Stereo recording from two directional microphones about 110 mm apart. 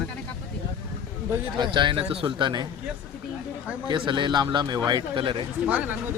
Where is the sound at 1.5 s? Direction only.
45° right (ahead or behind).